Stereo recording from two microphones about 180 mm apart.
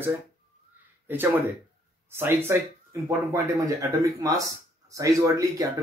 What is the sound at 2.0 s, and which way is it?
Speech, 15° right (ahead or behind).